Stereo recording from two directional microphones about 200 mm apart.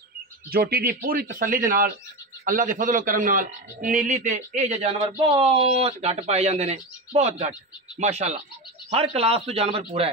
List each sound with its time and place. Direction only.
0.5 s a man's voice: 50° right (ahead or behind); by 10.0 s 30° right (ahead or behind)